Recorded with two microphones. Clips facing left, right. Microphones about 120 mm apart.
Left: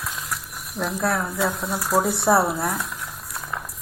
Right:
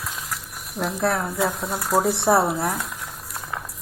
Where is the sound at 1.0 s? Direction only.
20° right (ahead or behind).